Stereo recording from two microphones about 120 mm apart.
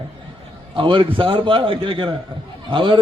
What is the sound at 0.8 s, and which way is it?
A man's voice, 45° right (ahead or behind).